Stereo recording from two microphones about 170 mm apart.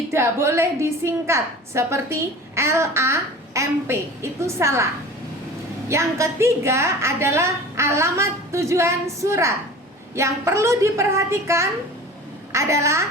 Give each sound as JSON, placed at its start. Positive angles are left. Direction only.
{"t": 0.1, "sound": "a woman's voice", "side_deg": -15}
{"t": 5.9, "sound": "a woman's voice", "side_deg": -15}